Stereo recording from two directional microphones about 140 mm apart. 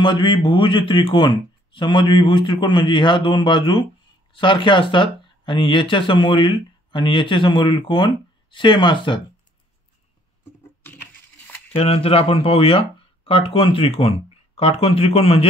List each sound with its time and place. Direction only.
0.0 s speech: 35° left (ahead or behind)
10.8 s a sound: 15° left (ahead or behind)
11.7 s speech: 45° left (ahead or behind)